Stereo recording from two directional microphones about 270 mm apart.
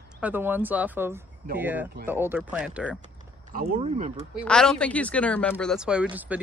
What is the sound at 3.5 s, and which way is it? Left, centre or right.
Speech, right.